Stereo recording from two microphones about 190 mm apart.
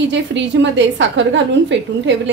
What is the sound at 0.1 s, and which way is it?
A woman's voice, 70° right (ahead or behind).